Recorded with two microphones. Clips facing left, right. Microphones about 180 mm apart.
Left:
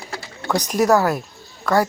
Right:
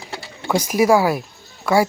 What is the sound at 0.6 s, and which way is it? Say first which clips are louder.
Speech: right 1 dB; 5° right (ahead or behind).